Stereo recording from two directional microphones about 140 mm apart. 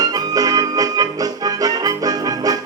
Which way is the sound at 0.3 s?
25° right (ahead or behind).